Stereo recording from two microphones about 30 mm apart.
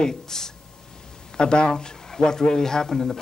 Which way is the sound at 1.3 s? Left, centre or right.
Left.